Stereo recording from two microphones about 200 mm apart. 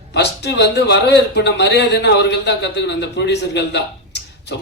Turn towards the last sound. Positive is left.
turn(degrees=60)  # may be behind; listen again after turning